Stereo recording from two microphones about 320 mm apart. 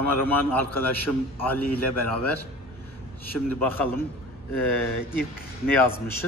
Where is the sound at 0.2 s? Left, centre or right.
Centre.